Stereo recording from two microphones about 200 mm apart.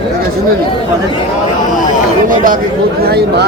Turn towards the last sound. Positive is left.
turn(degrees=-55)  # may be behind; listen again after turning